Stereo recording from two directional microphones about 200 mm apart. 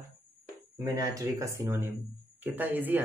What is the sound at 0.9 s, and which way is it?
Speech, 15° right (ahead or behind).